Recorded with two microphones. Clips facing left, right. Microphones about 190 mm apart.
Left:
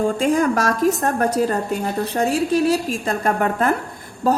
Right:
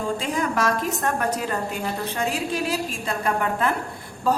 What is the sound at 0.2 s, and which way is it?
A woman's voice, 45° left (ahead or behind).